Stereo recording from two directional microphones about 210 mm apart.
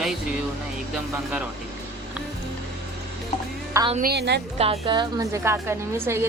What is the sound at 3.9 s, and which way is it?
Speech, 45° right (ahead or behind).